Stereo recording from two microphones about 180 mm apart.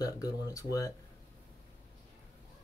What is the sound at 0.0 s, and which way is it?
Speech, 20° left (ahead or behind).